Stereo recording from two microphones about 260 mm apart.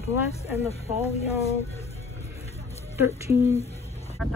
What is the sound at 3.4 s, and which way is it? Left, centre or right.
Speech, left.